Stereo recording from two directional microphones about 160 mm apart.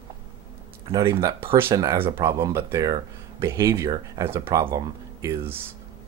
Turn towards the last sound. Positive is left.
turn(degrees=-20)  # may be behind; listen again after turning